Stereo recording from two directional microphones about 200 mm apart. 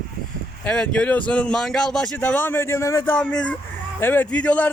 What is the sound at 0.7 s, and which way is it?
Speech, 5° left (ahead or behind).